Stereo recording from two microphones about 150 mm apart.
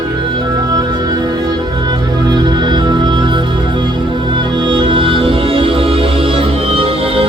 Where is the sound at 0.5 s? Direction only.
25° right (ahead or behind).